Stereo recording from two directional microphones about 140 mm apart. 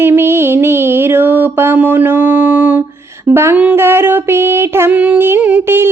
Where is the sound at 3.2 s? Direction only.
20° right (ahead or behind).